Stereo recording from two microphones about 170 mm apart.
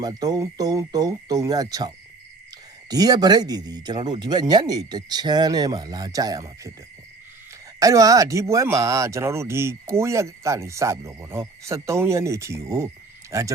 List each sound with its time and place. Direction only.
0.0 s speech: 20° right (ahead or behind)
2.9 s speech: 20° right (ahead or behind)
7.8 s speech: 20° right (ahead or behind)